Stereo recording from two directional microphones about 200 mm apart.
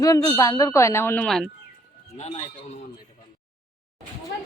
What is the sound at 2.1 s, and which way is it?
Speech, 35° left (ahead or behind).